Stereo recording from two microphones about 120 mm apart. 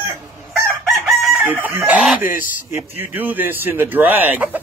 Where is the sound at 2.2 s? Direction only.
80° left.